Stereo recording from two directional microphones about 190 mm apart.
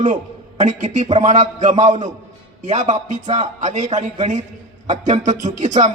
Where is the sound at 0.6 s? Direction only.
40° right (ahead or behind).